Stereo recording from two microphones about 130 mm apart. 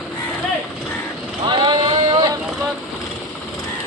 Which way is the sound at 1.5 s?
35° right (ahead or behind).